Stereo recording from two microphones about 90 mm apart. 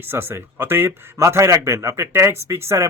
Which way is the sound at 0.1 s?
25° right (ahead or behind).